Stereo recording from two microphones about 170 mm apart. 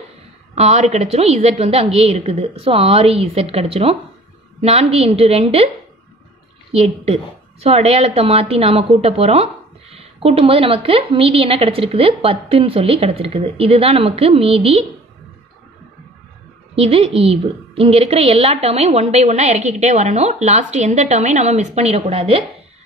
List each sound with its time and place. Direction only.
0.6 s a woman's voice: 40° right (ahead or behind)
6.7 s a woman's voice: 40° right (ahead or behind)
16.7 s a woman's voice: 35° right (ahead or behind)